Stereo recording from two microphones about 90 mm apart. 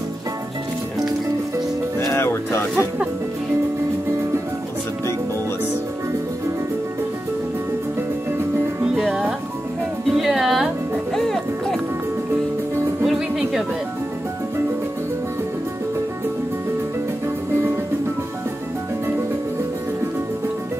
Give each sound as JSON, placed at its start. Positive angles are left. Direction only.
{"t": 2.0, "sound": "music", "side_deg": 30}
{"t": 8.9, "sound": "music", "side_deg": 0}
{"t": 13.0, "sound": "music", "side_deg": -5}